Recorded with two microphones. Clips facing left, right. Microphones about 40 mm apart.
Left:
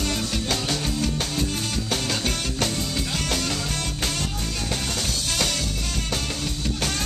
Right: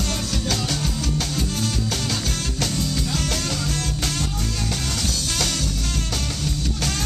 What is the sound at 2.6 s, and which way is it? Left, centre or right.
Music, centre.